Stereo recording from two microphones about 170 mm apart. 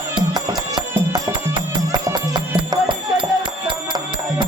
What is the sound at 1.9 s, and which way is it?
Music, 25° right (ahead or behind).